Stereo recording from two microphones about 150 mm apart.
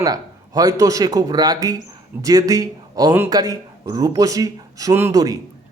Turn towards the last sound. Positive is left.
turn(degrees=-25)  # may be behind; listen again after turning